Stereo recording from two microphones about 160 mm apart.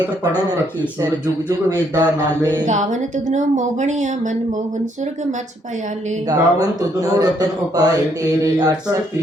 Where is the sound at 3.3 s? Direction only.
50° right (ahead or behind).